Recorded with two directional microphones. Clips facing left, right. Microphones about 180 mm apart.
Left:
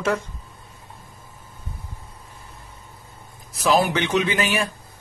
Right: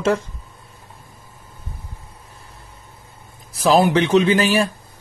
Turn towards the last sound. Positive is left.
turn(degrees=-30)  # may be behind; listen again after turning